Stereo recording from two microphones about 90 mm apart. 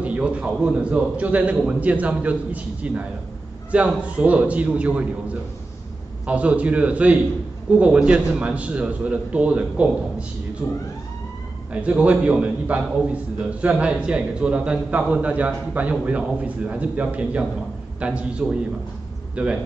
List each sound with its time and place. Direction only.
0.0 s a man's voice: 15° right (ahead or behind)
11.7 s a man's voice: 15° right (ahead or behind)